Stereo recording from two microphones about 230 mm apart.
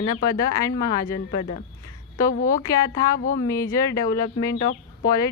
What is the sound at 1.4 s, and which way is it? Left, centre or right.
Speech, left.